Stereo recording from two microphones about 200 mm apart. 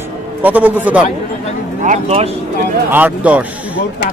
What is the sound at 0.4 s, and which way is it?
Speech, 10° right (ahead or behind).